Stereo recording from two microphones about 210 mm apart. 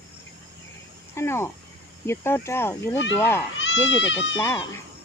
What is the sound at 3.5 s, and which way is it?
Speech, 60° left (ahead or behind).